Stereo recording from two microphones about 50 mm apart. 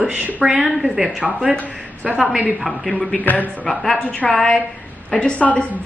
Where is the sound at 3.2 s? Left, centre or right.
Left.